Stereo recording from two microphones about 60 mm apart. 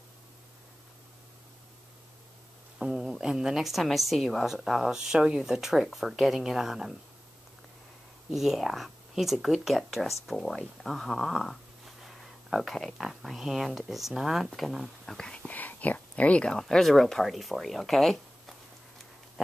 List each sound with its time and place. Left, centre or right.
2.8 s a woman's voice: centre
8.3 s speech: centre
15.1 s speech: centre
15.4 s speech: left
16.5 s speech: centre